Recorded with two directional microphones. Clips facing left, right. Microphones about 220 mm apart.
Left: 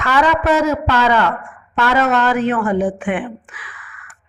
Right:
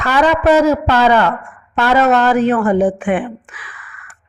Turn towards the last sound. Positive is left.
turn(degrees=-40)  # may be behind; listen again after turning